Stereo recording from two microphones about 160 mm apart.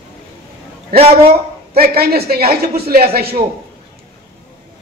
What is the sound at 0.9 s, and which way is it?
Speech, 40° right (ahead or behind).